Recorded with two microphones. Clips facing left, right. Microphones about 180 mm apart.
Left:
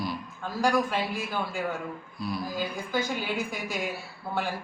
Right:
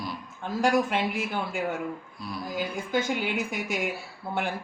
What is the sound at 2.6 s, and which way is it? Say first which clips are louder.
A woman's voice: right 5 dB; 20° right (ahead or behind).